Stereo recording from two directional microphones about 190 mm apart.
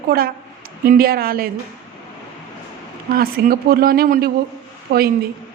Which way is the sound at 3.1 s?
50° right (ahead or behind).